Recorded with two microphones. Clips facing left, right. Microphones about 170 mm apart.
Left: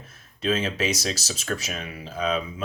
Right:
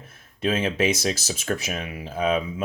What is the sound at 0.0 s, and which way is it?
Speech, 55° right (ahead or behind).